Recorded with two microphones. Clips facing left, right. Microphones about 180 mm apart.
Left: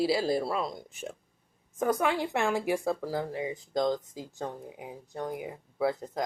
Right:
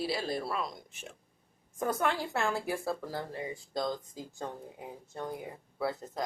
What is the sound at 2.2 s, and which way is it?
Speech, 20° left (ahead or behind).